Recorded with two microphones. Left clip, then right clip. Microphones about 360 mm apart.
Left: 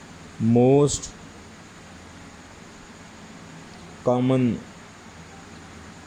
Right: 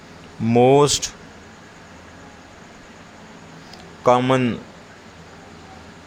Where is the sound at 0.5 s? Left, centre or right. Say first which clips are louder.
Right 4 dB; right.